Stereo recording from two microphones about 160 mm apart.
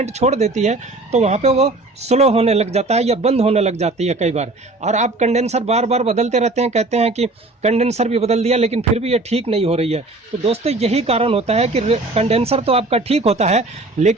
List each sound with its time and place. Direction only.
0.0 s speech: 45° right (ahead or behind)